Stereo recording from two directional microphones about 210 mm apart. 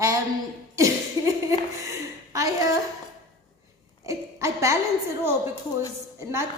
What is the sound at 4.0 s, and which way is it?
Speech, 15° right (ahead or behind).